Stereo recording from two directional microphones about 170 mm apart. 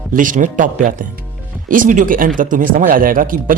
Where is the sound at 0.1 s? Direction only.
50° right (ahead or behind).